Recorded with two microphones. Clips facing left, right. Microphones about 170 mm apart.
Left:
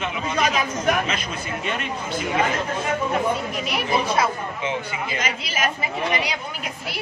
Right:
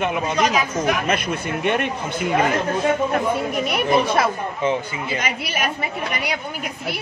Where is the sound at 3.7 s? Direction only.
55° right (ahead or behind).